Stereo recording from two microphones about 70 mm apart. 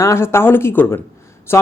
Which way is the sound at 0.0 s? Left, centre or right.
Left.